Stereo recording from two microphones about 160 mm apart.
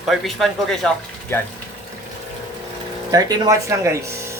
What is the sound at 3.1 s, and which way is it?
Speech, 25° right (ahead or behind).